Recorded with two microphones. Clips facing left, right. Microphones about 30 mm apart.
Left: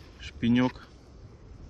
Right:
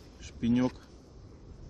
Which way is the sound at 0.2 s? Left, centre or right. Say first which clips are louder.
Left 3 dB; left.